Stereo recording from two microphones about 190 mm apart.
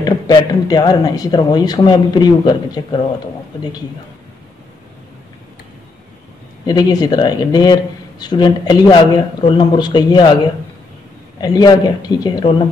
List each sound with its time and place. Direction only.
0.0 s speech: 20° left (ahead or behind)
6.6 s speech: 20° left (ahead or behind)
11.4 s speech: 20° left (ahead or behind)